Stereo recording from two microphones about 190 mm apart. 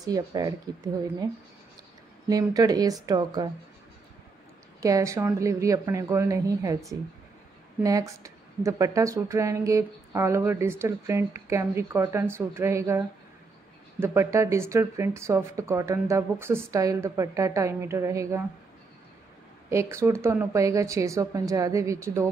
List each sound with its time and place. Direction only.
0.0 s speech: 20° right (ahead or behind)
2.2 s speech: 20° right (ahead or behind)
4.7 s a woman's voice: 15° right (ahead or behind)
19.7 s a woman's voice: 15° right (ahead or behind)